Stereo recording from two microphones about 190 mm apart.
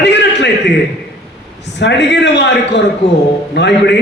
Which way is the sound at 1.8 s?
65° left (ahead or behind).